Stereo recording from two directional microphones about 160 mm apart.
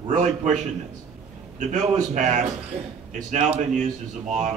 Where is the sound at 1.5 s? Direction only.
50° right (ahead or behind).